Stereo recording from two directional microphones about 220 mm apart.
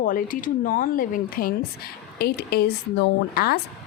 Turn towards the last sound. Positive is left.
turn(degrees=45)  # may be behind; listen again after turning